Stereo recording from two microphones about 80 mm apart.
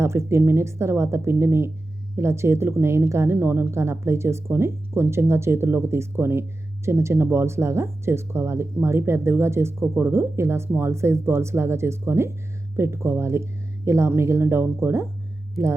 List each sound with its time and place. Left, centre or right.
0.0 s speech: right